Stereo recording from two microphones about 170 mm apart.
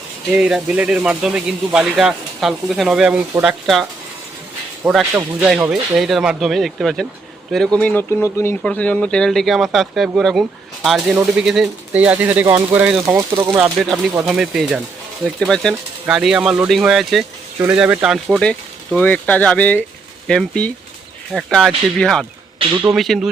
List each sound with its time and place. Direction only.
0.3 s speech: 5° right (ahead or behind)
14.3 s speech: 5° right (ahead or behind)